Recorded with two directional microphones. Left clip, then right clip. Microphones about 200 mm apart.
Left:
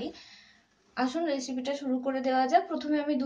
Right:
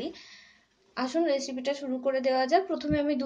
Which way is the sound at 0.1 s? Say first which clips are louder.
Right 2 dB; 30° right (ahead or behind).